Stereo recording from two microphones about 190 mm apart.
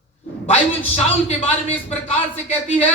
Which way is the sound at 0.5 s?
30° left (ahead or behind).